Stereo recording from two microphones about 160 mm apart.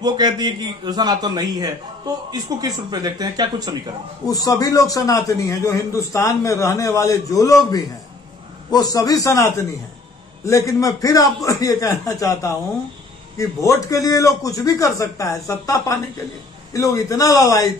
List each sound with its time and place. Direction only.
0.0 s a man's voice: 25° right (ahead or behind)
4.3 s a man's voice: 20° left (ahead or behind)
8.7 s a man's voice: 25° left (ahead or behind)